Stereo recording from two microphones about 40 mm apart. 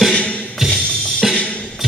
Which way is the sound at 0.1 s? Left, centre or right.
Left.